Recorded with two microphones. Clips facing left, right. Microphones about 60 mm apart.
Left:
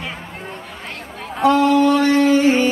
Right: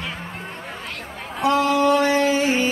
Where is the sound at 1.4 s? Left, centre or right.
Centre.